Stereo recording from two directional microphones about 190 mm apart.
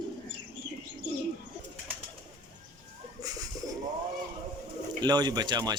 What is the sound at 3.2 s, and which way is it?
Bird, 20° right (ahead or behind).